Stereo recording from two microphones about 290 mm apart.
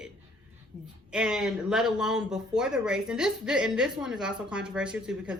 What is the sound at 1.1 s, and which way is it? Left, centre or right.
Speech, centre.